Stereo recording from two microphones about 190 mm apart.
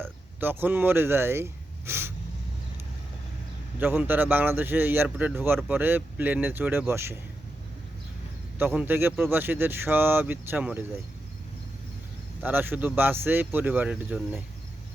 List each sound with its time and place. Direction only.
0.0 s speech: 10° right (ahead or behind)
1.9 s snort: 10° right (ahead or behind)
3.8 s speech: 10° right (ahead or behind)
8.5 s speech: 10° right (ahead or behind)
12.4 s speech: 10° right (ahead or behind)